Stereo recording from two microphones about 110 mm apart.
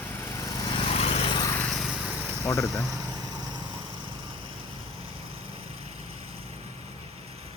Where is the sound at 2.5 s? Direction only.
25° left (ahead or behind).